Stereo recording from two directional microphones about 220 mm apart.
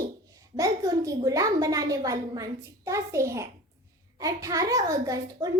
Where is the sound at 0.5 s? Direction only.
15° right (ahead or behind).